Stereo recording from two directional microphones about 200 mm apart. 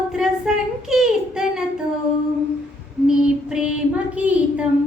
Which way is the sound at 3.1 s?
5° right (ahead or behind).